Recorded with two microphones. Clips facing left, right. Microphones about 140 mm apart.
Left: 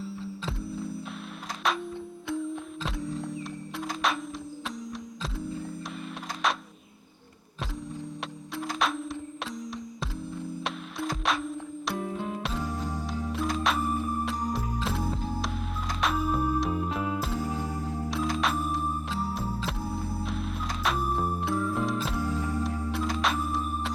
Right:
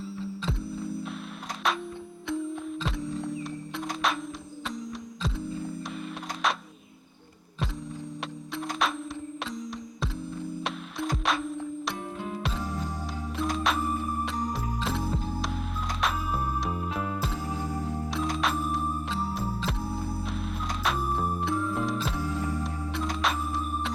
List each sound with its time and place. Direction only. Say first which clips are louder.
0.0 s music: right 2 dB; centre (ahead or behind)
5.2 s music: right 2 dB; centre (ahead or behind)
8.5 s music: even; centre (ahead or behind)